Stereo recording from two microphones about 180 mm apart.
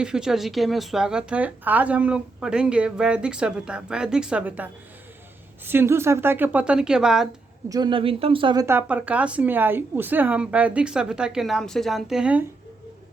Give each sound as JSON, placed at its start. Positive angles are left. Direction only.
{"t": 0.0, "sound": "a woman's voice", "side_deg": -5}
{"t": 7.7, "sound": "speech", "side_deg": -25}
{"t": 8.6, "sound": "a woman's voice", "side_deg": -10}